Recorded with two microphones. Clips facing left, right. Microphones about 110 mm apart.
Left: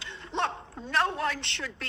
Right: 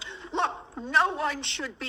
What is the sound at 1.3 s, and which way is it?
Speech, 65° left (ahead or behind).